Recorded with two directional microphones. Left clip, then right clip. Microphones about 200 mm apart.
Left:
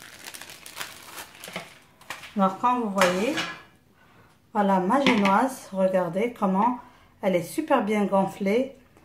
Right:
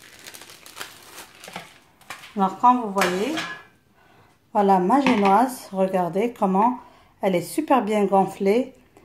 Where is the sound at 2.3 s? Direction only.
40° right (ahead or behind).